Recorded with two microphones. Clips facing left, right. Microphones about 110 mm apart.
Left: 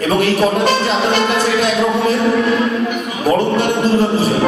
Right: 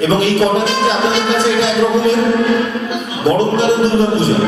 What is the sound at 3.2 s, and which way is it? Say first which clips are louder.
Speech: right 2 dB; 45° left (ahead or behind).